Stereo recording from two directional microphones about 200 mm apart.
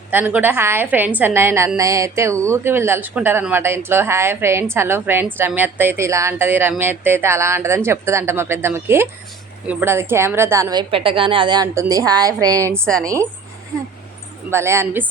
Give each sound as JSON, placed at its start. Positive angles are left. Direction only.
{"t": 0.1, "sound": "a woman's voice", "side_deg": -10}
{"t": 12.7, "sound": "a woman's voice", "side_deg": 5}
{"t": 14.5, "sound": "a woman's voice", "side_deg": -15}